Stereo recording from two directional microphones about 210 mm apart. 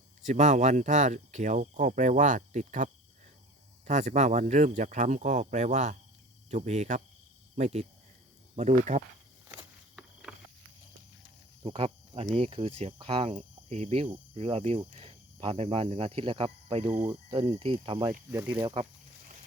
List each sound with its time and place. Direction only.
0.2 s speech: 35° right (ahead or behind)
9.9 s a sound: centre (ahead or behind)
11.6 s cricket: 25° right (ahead or behind)
12.2 s speech: 25° right (ahead or behind)